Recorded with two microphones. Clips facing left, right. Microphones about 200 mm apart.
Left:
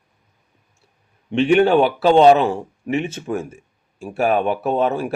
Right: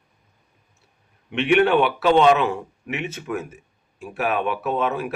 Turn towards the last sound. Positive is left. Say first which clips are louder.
# left 4 dB
turn(degrees=30)  # may be behind; listen again after turning